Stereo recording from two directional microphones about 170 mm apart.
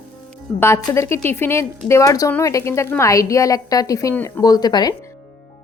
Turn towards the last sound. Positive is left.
turn(degrees=25)  # may be behind; listen again after turning